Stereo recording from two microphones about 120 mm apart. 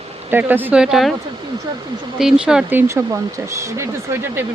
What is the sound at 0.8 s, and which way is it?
Speech, centre (ahead or behind).